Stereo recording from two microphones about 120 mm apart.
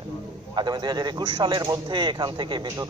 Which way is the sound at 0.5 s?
35° right (ahead or behind).